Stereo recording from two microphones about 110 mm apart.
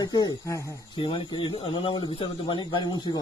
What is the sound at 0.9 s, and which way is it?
Speech, 50° left (ahead or behind).